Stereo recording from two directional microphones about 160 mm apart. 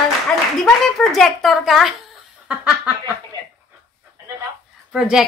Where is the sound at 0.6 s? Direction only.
Centre (ahead or behind).